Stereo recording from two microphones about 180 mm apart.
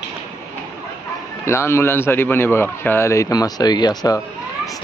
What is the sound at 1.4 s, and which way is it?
Speech, 15° left (ahead or behind).